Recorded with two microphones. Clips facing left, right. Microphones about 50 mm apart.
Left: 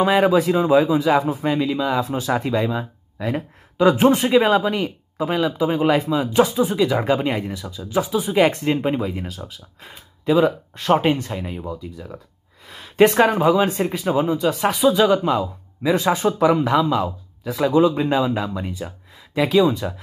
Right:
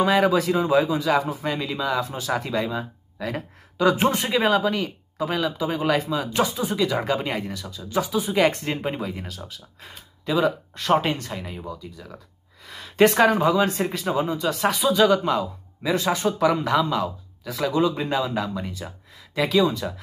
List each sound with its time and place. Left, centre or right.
0.0 s speech: left
2.0 s speech: left
6.6 s speech: centre
15.9 s speech: left
16.2 s speech: centre